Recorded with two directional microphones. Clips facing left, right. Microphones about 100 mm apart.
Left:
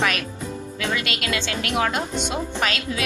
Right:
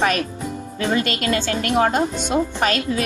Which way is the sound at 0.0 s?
40° right (ahead or behind).